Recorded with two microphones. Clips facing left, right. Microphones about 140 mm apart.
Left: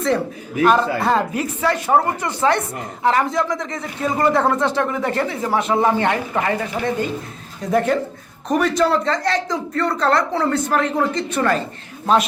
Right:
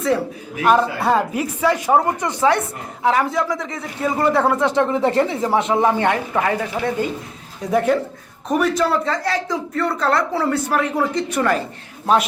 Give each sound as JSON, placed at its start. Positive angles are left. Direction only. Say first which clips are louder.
{"t": 0.6, "sound": "speech", "louder": "even", "side_deg": -10}
{"t": 4.8, "sound": "a woman's voice", "louder": "right 4 dB", "side_deg": -25}